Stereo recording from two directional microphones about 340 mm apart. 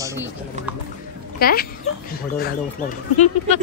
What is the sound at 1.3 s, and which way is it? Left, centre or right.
Speech, left.